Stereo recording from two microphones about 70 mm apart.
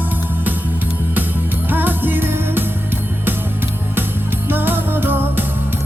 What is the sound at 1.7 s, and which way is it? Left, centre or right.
Music, right.